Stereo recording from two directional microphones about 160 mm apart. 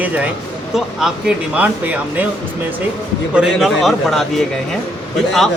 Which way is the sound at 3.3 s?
5° right (ahead or behind).